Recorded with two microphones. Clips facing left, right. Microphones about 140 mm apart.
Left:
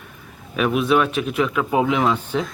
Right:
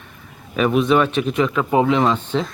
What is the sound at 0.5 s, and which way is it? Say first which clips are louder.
Speech: right 2 dB; 5° left (ahead or behind).